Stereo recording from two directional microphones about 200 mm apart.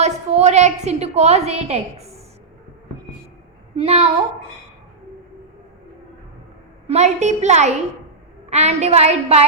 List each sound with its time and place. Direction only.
0.0 s a woman's voice: 35° right (ahead or behind)
3.8 s a woman's voice: 30° right (ahead or behind)
6.8 s a woman's voice: 35° right (ahead or behind)